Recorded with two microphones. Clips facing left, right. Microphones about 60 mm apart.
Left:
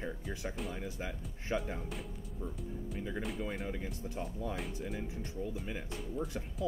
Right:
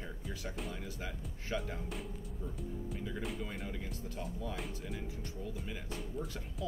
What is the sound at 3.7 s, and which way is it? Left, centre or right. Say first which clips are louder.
Speech: left 3 dB; left.